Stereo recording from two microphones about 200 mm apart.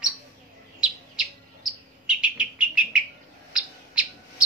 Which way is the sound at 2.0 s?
5° right (ahead or behind).